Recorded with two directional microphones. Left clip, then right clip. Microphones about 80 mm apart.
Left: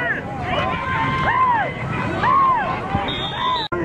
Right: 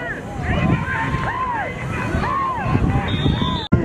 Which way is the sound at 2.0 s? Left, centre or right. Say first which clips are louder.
Left 5 dB; centre.